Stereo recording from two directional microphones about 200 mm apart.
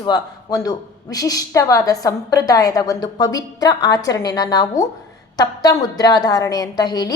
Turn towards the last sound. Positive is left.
turn(degrees=20)  # may be behind; listen again after turning